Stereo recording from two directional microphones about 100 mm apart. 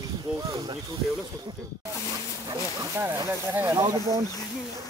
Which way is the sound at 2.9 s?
25° right (ahead or behind).